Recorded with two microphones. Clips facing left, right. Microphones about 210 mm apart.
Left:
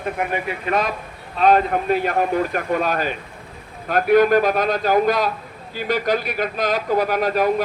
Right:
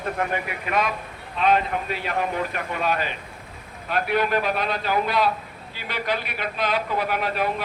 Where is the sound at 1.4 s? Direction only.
40° left (ahead or behind).